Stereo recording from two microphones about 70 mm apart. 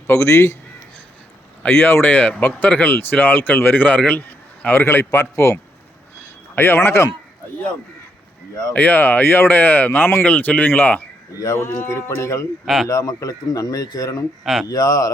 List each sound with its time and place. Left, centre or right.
0.1 s speech: left
1.7 s a man's voice: left
6.6 s speech: left
8.7 s a man's voice: left
11.5 s speech: left
12.6 s a man's voice: centre
12.9 s a man's voice: left